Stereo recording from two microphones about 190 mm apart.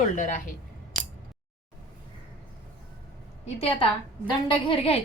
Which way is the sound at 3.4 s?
30° left (ahead or behind).